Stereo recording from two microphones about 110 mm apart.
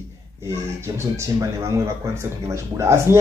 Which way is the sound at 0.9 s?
25° right (ahead or behind).